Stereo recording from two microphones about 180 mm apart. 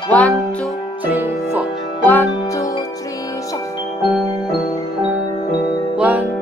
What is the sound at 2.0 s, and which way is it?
Music, 15° left (ahead or behind).